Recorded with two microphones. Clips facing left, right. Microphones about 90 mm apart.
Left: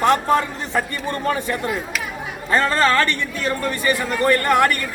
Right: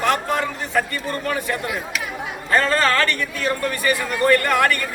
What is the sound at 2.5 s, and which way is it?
A man's voice, 20° left (ahead or behind).